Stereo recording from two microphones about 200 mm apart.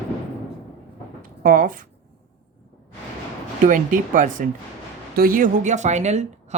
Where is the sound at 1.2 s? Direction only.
45° right (ahead or behind).